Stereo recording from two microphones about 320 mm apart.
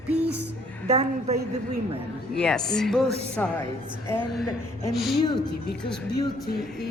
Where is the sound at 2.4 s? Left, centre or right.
Centre.